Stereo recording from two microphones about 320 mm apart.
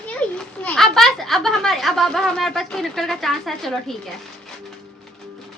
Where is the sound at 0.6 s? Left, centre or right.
Centre.